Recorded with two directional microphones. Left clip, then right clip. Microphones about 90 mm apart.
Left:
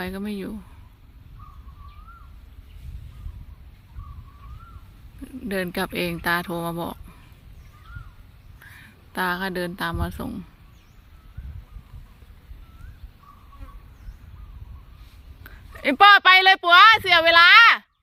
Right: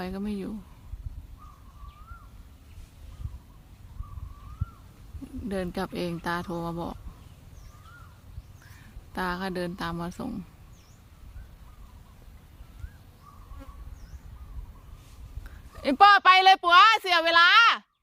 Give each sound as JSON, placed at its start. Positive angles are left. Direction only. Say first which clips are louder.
{"t": 0.0, "sound": "speech", "louder": "left 4 dB", "side_deg": 20}
{"t": 5.2, "sound": "speech", "louder": "left 5 dB", "side_deg": 30}
{"t": 8.7, "sound": "speech", "louder": "left 5 dB", "side_deg": 25}
{"t": 15.4, "sound": "speech", "louder": "left 5 dB", "side_deg": 30}